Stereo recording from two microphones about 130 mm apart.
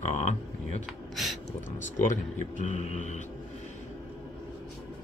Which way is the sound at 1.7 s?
75° left (ahead or behind).